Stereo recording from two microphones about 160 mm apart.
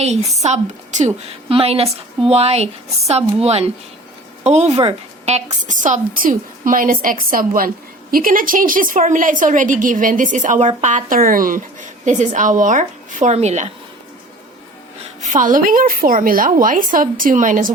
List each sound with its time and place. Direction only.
0.0 s a woman's voice: 45° right (ahead or behind)
5.6 s a woman's voice: 50° right (ahead or behind)
15.2 s a woman's voice: 50° right (ahead or behind)